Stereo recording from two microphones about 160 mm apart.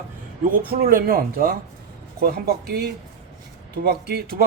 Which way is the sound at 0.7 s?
65° right (ahead or behind).